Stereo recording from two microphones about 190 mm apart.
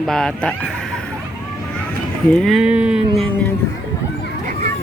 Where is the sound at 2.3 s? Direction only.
5° left (ahead or behind).